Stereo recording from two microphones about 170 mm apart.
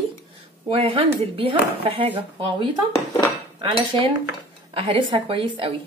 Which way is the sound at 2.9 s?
15° left (ahead or behind).